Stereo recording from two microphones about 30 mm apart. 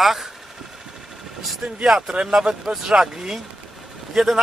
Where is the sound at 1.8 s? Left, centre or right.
Centre.